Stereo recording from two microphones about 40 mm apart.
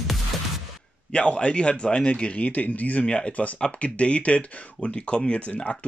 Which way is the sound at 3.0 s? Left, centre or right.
Left.